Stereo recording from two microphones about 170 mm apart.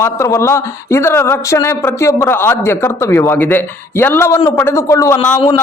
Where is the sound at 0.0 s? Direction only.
15° left (ahead or behind).